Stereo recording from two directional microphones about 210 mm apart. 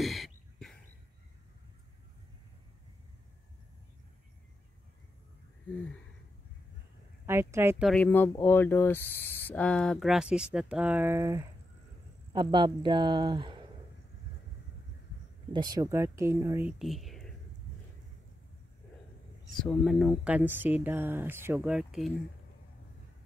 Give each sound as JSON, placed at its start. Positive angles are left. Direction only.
{"t": 0.0, "sound": "bird", "side_deg": 0}
{"t": 7.2, "sound": "speech", "side_deg": -10}
{"t": 7.8, "sound": "speech", "side_deg": 5}
{"t": 15.5, "sound": "speech", "side_deg": -20}
{"t": 19.6, "sound": "speech", "side_deg": 0}